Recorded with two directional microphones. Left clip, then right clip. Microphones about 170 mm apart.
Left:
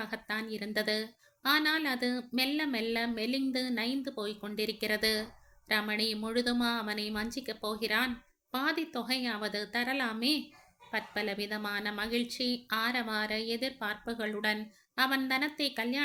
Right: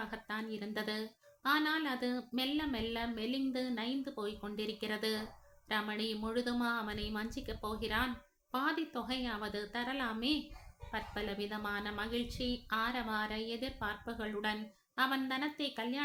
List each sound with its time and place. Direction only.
0.0 s a woman's voice: 20° left (ahead or behind)